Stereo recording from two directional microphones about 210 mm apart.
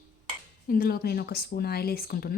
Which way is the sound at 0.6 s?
45° left (ahead or behind).